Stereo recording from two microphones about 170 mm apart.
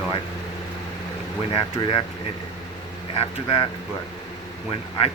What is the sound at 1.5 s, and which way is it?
Speech, 30° left (ahead or behind).